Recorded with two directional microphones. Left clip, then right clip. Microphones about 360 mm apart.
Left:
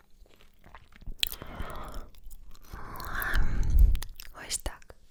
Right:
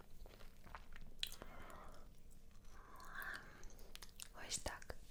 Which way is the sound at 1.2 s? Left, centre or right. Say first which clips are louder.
Left 16 dB; left.